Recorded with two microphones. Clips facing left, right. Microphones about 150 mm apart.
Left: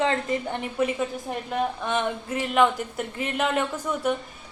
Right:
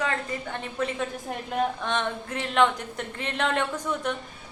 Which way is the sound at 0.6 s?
10° left (ahead or behind).